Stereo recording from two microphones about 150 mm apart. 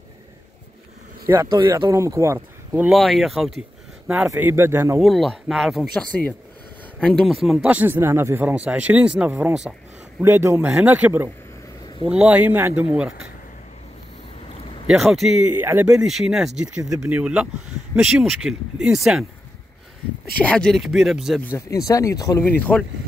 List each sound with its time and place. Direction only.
1.2 s speech: 20° right (ahead or behind); by 3.5 s centre (ahead or behind)
4.3 s speech: 15° right (ahead or behind)
5.0 s speech: centre (ahead or behind)
7.4 s speech: 5° right (ahead or behind)
10.2 s speech: 15° right (ahead or behind)
14.9 s speech: centre (ahead or behind)
20.4 s speech: 5° left (ahead or behind)
21.4 s speech: 15° left (ahead or behind)
22.4 s speech: 10° left (ahead or behind)